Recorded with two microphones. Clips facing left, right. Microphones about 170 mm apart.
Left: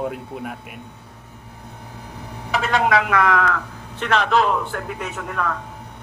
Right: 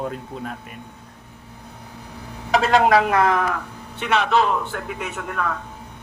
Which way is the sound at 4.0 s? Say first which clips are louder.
Left 1 dB; 5° right (ahead or behind).